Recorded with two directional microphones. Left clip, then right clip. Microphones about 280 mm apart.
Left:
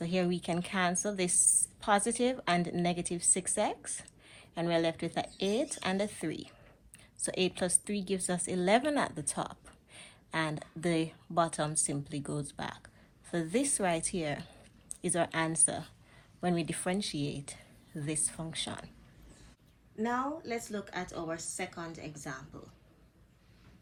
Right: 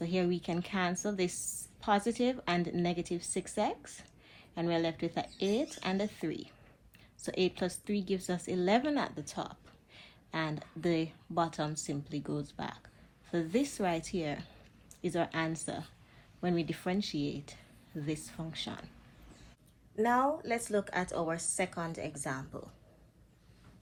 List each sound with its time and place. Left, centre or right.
0.0 s a woman's voice: left
20.0 s a woman's voice: right